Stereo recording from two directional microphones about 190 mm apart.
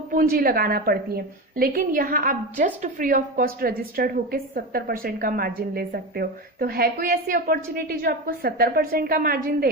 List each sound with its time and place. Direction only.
0.1 s a woman's voice: 50° right (ahead or behind)